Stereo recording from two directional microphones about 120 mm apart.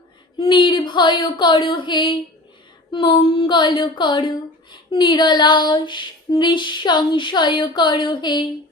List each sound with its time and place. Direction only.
0.3 s female singing: 45° left (ahead or behind)
2.9 s speech: 45° left (ahead or behind)
4.7 s female singing: 40° left (ahead or behind)